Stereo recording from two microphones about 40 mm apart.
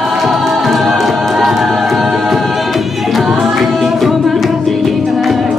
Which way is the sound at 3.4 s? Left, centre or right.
Centre.